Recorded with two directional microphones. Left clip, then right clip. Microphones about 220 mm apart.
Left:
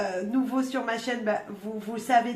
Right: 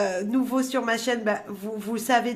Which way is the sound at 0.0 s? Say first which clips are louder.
Right 3 dB; 50° right (ahead or behind).